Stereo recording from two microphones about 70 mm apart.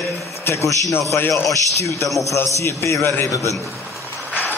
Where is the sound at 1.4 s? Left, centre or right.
Left.